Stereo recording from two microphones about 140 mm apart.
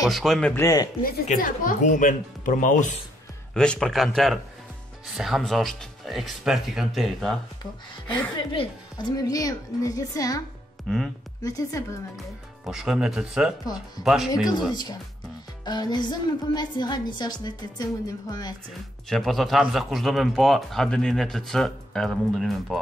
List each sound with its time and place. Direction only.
0.0 s speech: centre (ahead or behind)
0.6 s a woman's voice: 25° left (ahead or behind)
1.0 s speech: 75° left (ahead or behind)
3.5 s speech: 5° left (ahead or behind)
8.4 s a woman's voice: 35° left (ahead or behind)
10.9 s speech: centre (ahead or behind)
11.4 s a woman's voice: 25° left (ahead or behind)
12.6 s speech: 5° right (ahead or behind)
14.7 s a woman's voice: 30° left (ahead or behind)
19.0 s speech: centre (ahead or behind)